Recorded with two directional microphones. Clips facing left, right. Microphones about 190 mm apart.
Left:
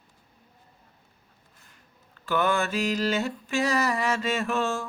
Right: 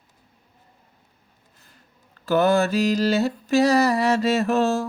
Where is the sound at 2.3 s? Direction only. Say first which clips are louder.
Right 7 dB; 40° right (ahead or behind).